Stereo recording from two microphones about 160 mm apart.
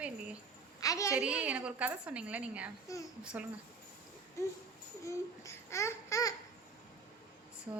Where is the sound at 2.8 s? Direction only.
20° left (ahead or behind).